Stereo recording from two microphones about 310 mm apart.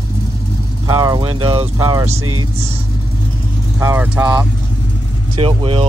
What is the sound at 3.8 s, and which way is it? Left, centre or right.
Speech, centre.